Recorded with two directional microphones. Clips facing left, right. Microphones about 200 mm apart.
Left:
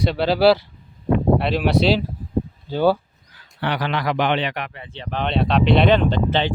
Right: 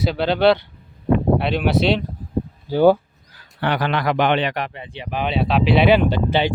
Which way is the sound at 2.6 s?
15° right (ahead or behind).